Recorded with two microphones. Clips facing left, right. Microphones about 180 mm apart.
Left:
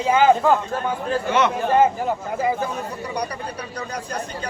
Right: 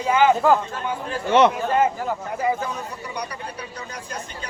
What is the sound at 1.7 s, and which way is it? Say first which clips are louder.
A man's voice: left 3 dB; 25° left (ahead or behind).